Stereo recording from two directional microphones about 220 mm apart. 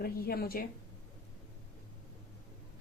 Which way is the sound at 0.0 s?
45° left (ahead or behind).